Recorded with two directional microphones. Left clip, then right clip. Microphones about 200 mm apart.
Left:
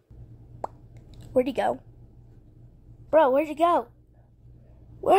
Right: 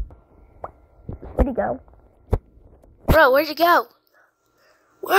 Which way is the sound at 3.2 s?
90° right.